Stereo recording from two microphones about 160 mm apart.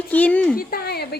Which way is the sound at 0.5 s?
75° left (ahead or behind).